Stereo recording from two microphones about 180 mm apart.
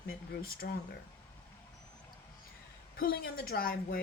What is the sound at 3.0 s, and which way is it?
Speech, 55° left (ahead or behind).